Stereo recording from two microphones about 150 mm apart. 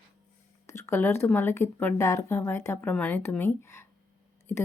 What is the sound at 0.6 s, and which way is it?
Speech, 20° left (ahead or behind).